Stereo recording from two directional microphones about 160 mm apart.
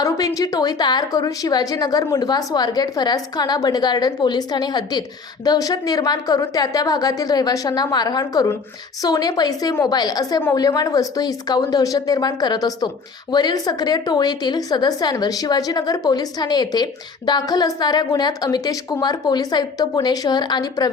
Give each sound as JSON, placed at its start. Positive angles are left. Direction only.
{"t": 0.0, "sound": "a woman's voice", "side_deg": 25}